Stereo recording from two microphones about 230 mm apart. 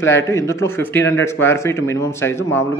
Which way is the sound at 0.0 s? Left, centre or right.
Centre.